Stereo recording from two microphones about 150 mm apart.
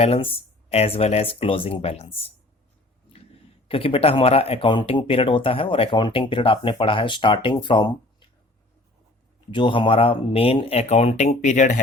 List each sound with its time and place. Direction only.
0.0 s speech: 40° left (ahead or behind)
3.7 s speech: 35° left (ahead or behind)
9.5 s speech: 35° left (ahead or behind); by 11.8 s 55° left (ahead or behind)